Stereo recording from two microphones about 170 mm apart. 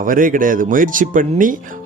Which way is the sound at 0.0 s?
55° right (ahead or behind).